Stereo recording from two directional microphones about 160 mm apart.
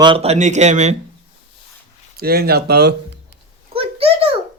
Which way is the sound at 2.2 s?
75° right (ahead or behind).